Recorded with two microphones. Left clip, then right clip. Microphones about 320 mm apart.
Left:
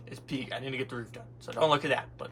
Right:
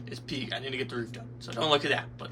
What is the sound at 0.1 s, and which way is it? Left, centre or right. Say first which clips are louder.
Speech: right 2 dB; centre.